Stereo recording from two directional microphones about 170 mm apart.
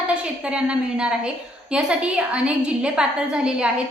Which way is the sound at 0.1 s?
5° right (ahead or behind).